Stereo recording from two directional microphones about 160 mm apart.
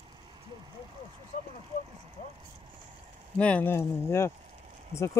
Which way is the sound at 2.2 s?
55° left (ahead or behind).